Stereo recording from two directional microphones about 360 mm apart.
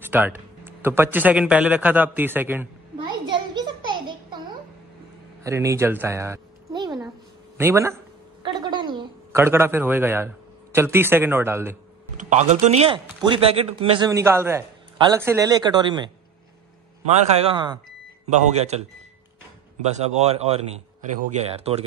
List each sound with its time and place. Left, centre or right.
0.0 s a sound: centre
5.4 s speech: centre
12.2 s a man's voice: centre
18.2 s a man's voice: centre
20.0 s a man's voice: centre